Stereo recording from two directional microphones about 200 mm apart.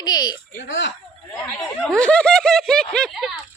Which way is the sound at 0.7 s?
65° left (ahead or behind).